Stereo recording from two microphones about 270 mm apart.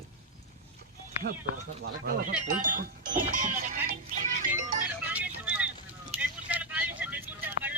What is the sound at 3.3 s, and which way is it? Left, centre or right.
Music, right.